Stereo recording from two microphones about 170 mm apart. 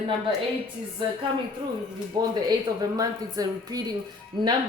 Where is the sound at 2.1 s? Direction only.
25° right (ahead or behind).